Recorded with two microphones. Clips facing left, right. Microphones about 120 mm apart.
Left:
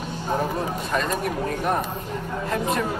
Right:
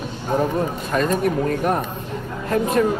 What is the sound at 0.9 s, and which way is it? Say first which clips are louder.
Speech: right 6 dB; 45° right (ahead or behind).